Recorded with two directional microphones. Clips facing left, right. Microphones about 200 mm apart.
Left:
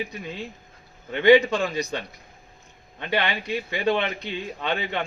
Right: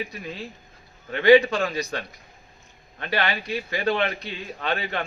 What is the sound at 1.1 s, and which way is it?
Speech, 20° left (ahead or behind).